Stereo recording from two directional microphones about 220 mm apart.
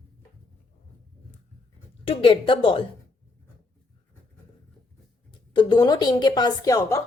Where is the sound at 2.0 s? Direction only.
25° left (ahead or behind).